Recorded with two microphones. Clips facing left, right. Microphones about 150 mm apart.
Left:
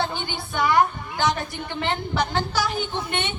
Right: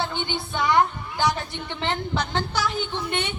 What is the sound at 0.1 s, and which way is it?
A woman's voice, 20° right (ahead or behind).